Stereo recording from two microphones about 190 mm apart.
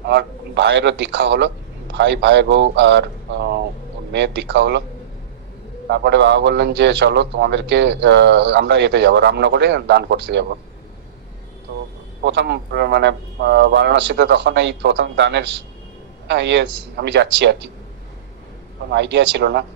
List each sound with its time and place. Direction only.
0.0 s a man's voice: 65° right (ahead or behind)
5.9 s a man's voice: 65° right (ahead or behind)
12.2 s a man's voice: 65° right (ahead or behind)
18.9 s a man's voice: 65° right (ahead or behind)